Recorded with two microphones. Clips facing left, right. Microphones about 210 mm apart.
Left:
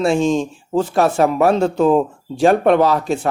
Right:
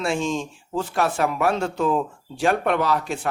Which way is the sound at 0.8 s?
25° left (ahead or behind).